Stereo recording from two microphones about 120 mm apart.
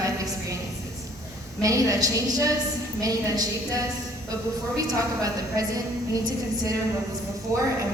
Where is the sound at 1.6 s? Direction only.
30° right (ahead or behind).